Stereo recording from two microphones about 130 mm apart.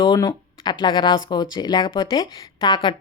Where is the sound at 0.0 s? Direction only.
35° left (ahead or behind).